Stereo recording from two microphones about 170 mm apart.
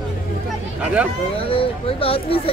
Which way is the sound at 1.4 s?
35° left (ahead or behind).